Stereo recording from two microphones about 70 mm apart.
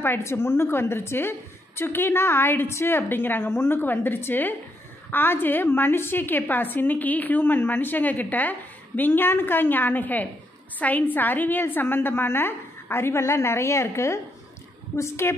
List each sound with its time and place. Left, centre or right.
0.0 s a woman's voice: left